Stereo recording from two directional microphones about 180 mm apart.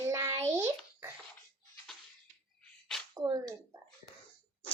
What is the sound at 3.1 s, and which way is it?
Speech, 20° right (ahead or behind).